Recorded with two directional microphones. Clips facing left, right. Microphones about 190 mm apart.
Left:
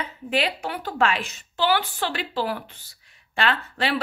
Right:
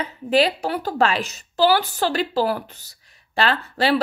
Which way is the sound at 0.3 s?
35° right (ahead or behind).